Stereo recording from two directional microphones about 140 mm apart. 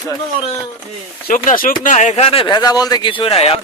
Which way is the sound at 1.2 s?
75° left (ahead or behind).